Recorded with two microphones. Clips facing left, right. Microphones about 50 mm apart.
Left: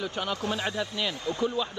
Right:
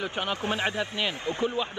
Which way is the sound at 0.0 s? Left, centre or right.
Right.